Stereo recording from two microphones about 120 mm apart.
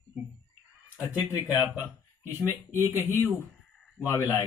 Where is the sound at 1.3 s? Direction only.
25° left (ahead or behind).